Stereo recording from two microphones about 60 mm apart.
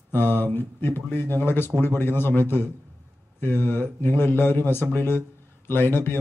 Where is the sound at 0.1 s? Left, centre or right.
Left.